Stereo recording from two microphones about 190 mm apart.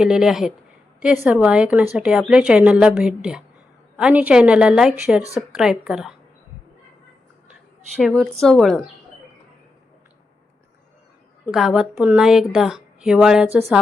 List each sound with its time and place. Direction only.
0.0 s a woman's voice: 5° right (ahead or behind)
5.2 s a woman's voice: 15° left (ahead or behind)
5.5 s a woman's voice: 5° right (ahead or behind)
7.9 s a woman's voice: centre (ahead or behind)
11.5 s a woman's voice: centre (ahead or behind)